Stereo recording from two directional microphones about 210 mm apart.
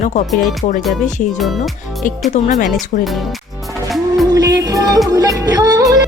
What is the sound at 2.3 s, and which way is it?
Speech, 35° left (ahead or behind).